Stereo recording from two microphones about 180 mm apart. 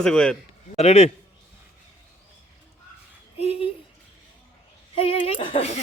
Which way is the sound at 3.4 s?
30° left (ahead or behind).